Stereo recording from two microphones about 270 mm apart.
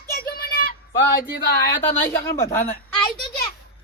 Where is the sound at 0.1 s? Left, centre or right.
Left.